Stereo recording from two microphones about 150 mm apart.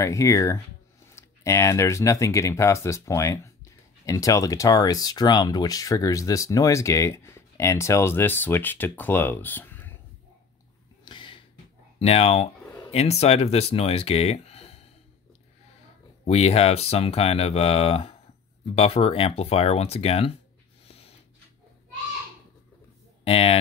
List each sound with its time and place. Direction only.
0.0 s speech: 20° left (ahead or behind)
11.1 s a sound: 35° left (ahead or behind)
12.0 s speech: 45° left (ahead or behind)
16.3 s speech: 45° left (ahead or behind)
23.2 s speech: 40° left (ahead or behind)